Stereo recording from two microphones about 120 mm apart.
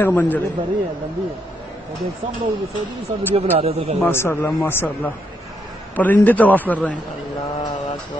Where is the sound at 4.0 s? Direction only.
20° left (ahead or behind).